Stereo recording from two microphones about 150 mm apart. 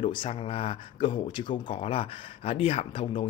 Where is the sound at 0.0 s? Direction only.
35° left (ahead or behind).